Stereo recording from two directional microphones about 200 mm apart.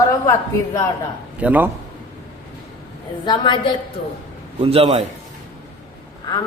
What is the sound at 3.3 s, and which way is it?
Speech, 25° left (ahead or behind).